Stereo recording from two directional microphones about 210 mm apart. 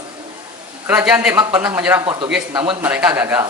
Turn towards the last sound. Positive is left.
turn(degrees=-10)  # may be behind; listen again after turning